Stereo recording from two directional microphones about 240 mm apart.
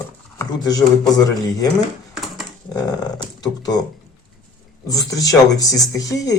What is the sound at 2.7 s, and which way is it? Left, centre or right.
Speech, centre.